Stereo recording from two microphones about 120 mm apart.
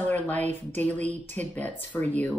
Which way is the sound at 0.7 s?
10° left (ahead or behind).